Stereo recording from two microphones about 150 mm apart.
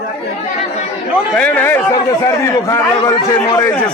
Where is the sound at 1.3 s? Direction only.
10° left (ahead or behind).